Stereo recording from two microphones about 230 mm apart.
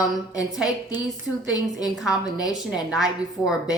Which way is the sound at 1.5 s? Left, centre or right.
Centre.